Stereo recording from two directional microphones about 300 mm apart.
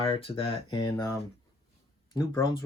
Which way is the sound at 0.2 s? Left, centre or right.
Centre.